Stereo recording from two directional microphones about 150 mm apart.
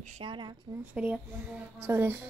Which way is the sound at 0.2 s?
35° right (ahead or behind).